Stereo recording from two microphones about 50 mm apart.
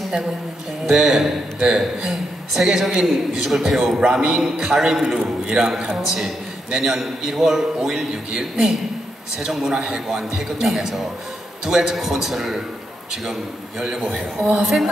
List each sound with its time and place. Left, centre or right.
0.8 s a woman's voice: centre
13.8 s a man's voice: right
14.4 s a woman's voice: centre